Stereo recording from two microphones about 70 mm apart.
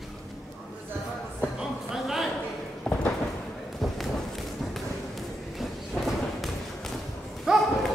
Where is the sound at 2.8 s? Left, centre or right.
Centre.